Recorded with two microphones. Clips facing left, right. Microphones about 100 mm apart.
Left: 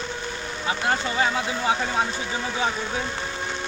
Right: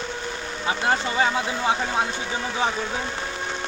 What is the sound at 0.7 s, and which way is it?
Speech, 25° right (ahead or behind).